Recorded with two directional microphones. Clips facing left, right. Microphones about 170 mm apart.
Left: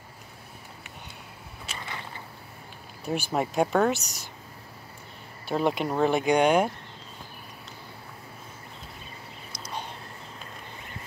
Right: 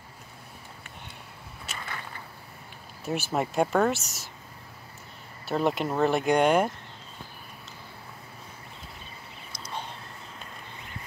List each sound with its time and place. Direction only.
3.1 s speech: centre (ahead or behind)
5.5 s speech: centre (ahead or behind)